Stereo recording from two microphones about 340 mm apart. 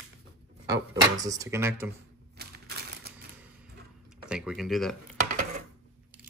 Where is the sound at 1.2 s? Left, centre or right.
Centre.